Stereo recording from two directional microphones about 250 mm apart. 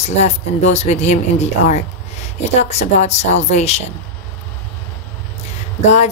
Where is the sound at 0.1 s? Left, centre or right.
Left.